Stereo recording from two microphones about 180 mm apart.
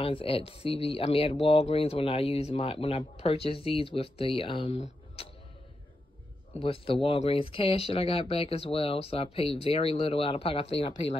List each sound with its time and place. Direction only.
0.0 s speech: 30° left (ahead or behind)
6.6 s speech: 30° left (ahead or behind)